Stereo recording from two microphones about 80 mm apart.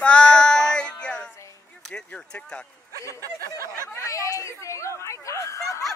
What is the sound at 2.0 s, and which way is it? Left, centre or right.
Speech, centre.